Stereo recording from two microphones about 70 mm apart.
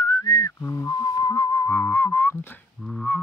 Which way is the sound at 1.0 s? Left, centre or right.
Left.